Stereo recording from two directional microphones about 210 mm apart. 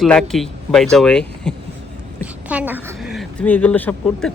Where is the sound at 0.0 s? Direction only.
Centre (ahead or behind).